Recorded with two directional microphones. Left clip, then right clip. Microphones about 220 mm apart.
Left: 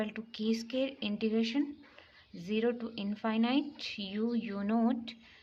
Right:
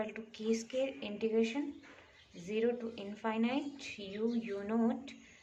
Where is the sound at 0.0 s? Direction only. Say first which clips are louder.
Left 2 dB; 35° left (ahead or behind).